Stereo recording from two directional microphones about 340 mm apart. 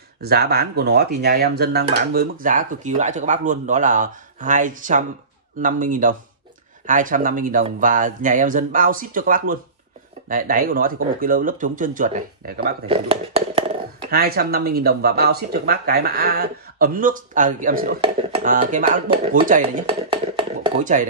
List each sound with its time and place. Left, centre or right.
0.2 s speech: right